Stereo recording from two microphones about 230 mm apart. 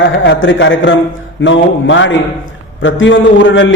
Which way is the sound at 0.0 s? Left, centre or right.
Left.